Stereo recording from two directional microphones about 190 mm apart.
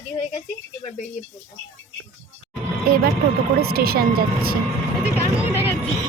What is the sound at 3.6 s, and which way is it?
Speech, 55° right (ahead or behind).